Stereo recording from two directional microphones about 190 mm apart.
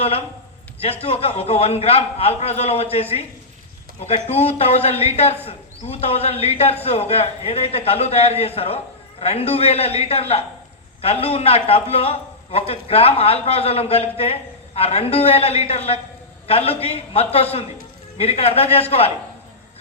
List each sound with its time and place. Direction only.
0.8 s a man's voice: 30° left (ahead or behind)